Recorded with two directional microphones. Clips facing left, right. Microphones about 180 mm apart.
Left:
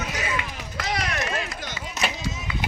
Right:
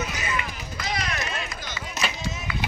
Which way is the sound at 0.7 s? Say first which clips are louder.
Left 2 dB; 70° left (ahead or behind).